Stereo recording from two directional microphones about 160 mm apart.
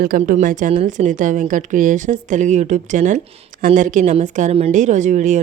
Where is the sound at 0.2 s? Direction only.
50° right (ahead or behind).